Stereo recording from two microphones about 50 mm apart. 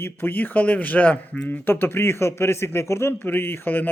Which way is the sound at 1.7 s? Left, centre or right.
Left.